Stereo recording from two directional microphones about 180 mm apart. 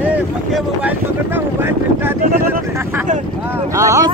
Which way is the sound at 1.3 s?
10° right (ahead or behind).